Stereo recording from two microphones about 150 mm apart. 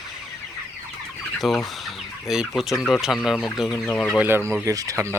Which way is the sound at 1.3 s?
Centre (ahead or behind).